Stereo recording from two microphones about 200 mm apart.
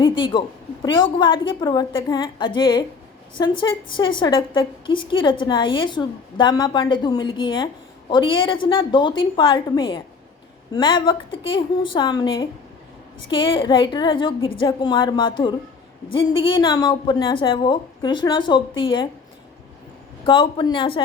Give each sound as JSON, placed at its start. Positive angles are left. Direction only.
{"t": 0.0, "sound": "a woman's voice", "side_deg": 25}
{"t": 20.2, "sound": "a woman's voice", "side_deg": 25}